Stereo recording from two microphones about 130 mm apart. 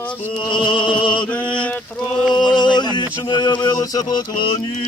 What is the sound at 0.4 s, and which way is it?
Music, 35° left (ahead or behind).